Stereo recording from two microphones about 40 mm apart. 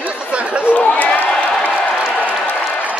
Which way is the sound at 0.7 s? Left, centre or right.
Left.